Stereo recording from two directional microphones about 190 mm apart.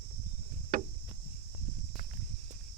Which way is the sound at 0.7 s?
45° right (ahead or behind).